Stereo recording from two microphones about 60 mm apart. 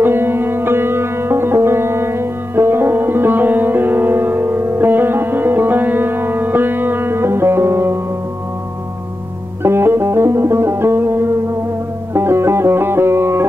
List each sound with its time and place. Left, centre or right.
0.0 s sitar: right
9.6 s music: right